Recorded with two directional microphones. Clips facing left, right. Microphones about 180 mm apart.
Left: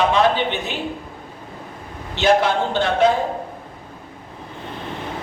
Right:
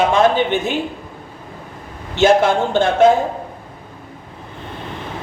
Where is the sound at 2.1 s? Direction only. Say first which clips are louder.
Right 4 dB; 50° right (ahead or behind).